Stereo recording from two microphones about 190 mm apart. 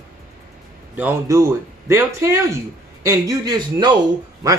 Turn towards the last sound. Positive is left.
turn(degrees=-20)  # may be behind; listen again after turning